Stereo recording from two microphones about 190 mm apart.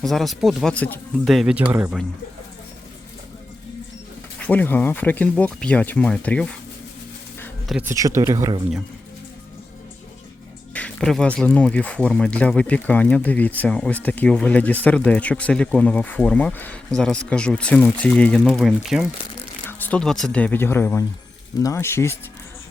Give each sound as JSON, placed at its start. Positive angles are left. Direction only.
{"t": 0.0, "sound": "speech", "side_deg": 0}
{"t": 4.4, "sound": "speech", "side_deg": 10}
{"t": 7.7, "sound": "speech", "side_deg": -10}
{"t": 10.8, "sound": "speech", "side_deg": 5}
{"t": 19.6, "sound": "speech", "side_deg": 10}